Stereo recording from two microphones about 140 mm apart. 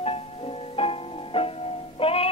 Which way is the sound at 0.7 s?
40° left (ahead or behind).